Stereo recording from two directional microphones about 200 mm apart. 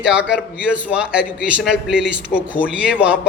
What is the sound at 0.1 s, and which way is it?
A man's voice, 5° right (ahead or behind).